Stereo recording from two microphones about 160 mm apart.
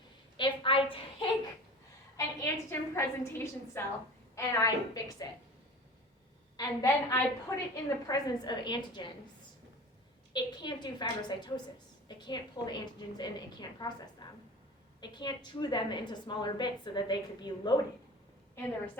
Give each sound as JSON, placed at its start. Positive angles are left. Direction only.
{"t": 0.3, "sound": "a sound", "side_deg": 30}
{"t": 2.1, "sound": "a woman's voice", "side_deg": 20}
{"t": 6.6, "sound": "a woman's voice", "side_deg": 20}
{"t": 10.3, "sound": "a woman's voice", "side_deg": 25}